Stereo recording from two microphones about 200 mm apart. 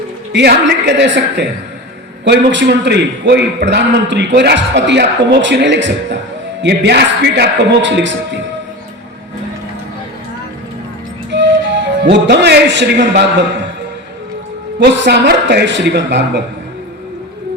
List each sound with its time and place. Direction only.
0.3 s a man's voice: 60° right (ahead or behind)
11.3 s music: 60° right (ahead or behind)
14.8 s a man's voice: 60° right (ahead or behind)